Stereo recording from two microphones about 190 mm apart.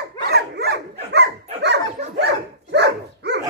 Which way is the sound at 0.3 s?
60° right (ahead or behind).